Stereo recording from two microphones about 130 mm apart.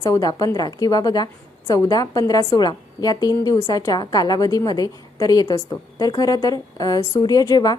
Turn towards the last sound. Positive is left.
turn(degrees=30)  # may be behind; listen again after turning